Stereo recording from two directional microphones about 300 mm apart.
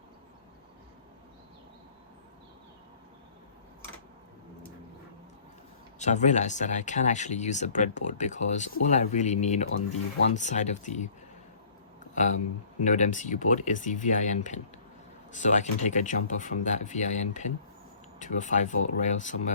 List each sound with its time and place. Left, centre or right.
6.0 s speech: left
12.1 s speech: left